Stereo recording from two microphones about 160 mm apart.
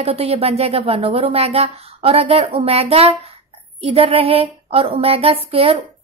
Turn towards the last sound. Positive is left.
turn(degrees=-35)  # may be behind; listen again after turning